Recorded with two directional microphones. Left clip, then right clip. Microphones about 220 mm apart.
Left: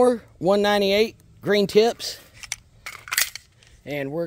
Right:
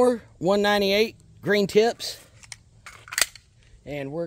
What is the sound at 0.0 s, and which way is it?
Speech, 5° left (ahead or behind).